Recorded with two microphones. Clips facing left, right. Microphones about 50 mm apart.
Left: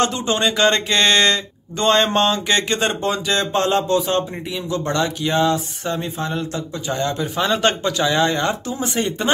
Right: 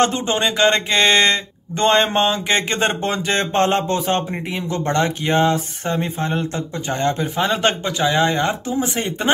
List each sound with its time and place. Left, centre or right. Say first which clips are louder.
0.0 s speech: right 2 dB; right
0.4 s a sound: even; centre
2.8 s speech: right 1 dB; right
7.4 s speech: left 1 dB; centre